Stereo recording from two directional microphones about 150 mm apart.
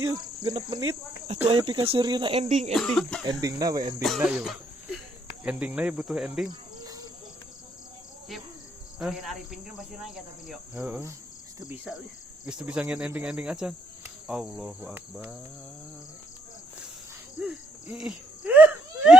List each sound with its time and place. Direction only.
0.0 s cricket: 25° right (ahead or behind)
1.5 s speech: 35° right (ahead or behind)
2.4 s speech: 45° right (ahead or behind)
2.7 s speech: 5° left (ahead or behind)
3.2 s cricket: 25° right (ahead or behind)
4.0 s speech: 5° right (ahead or behind)
5.4 s cricket: 10° right (ahead or behind)
6.5 s insect: 25° right (ahead or behind)
9.0 s speech: centre (ahead or behind)
13.1 s cricket: 10° right (ahead or behind)
17.4 s cricket: 5° right (ahead or behind)